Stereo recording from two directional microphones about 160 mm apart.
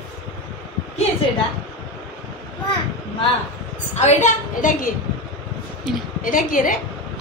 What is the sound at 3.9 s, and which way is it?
Speech, 45° left (ahead or behind).